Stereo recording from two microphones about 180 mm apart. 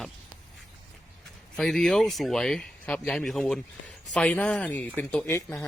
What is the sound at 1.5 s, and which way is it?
Speech, centre (ahead or behind).